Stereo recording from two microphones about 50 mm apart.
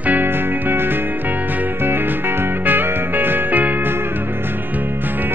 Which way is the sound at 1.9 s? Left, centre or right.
Right.